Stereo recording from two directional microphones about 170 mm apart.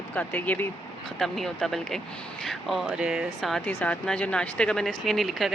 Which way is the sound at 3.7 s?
10° left (ahead or behind).